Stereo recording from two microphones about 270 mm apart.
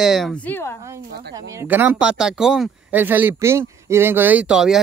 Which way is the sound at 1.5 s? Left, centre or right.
Centre.